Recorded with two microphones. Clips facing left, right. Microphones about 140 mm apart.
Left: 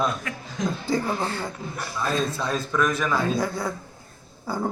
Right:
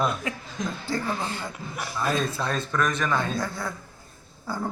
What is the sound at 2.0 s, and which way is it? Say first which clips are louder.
A man's voice: left 1 dB; centre (ahead or behind).